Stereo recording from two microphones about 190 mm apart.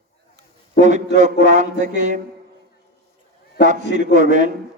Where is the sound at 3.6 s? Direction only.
40° right (ahead or behind).